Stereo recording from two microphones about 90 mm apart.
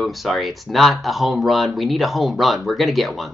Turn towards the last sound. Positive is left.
turn(degrees=0)  # may be behind; listen again after turning